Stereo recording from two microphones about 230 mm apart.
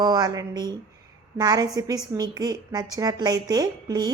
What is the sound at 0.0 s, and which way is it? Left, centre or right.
A woman's voice, centre.